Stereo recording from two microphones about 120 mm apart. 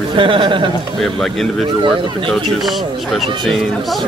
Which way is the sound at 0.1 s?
40° right (ahead or behind).